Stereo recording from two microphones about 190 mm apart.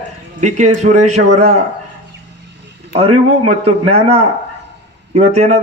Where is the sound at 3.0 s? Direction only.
35° right (ahead or behind).